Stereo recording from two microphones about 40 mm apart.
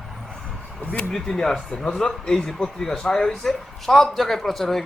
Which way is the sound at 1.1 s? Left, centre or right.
Centre.